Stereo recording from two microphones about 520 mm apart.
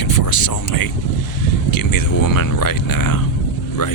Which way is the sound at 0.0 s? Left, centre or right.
Left.